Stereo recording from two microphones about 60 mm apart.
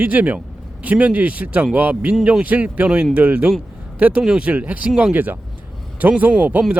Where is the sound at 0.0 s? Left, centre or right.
Right.